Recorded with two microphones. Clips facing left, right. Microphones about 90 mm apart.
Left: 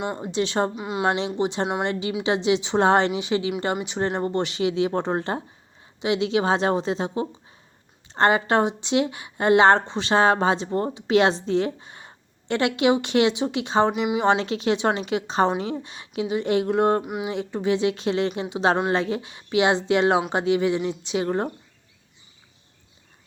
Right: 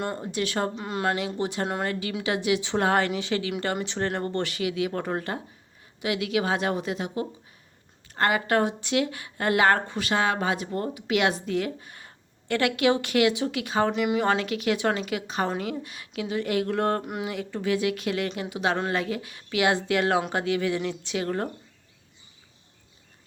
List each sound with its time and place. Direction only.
0.0 s speech: 10° left (ahead or behind)
0.3 s speech: 25° left (ahead or behind)
0.8 s speech: 10° left (ahead or behind)
1.0 s speech: 25° left (ahead or behind)
17.0 s a sound: 5° left (ahead or behind)
17.2 s speech: 20° left (ahead or behind)